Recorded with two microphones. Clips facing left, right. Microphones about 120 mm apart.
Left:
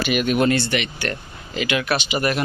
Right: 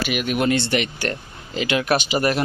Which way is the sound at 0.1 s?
5° right (ahead or behind).